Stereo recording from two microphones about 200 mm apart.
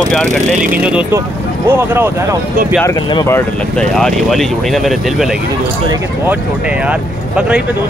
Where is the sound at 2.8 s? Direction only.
20° left (ahead or behind).